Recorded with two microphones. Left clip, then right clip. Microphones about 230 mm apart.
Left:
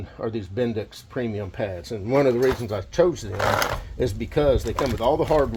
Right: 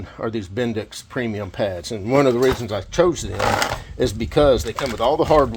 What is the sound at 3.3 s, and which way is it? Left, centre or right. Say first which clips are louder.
Speech: right 2 dB; centre.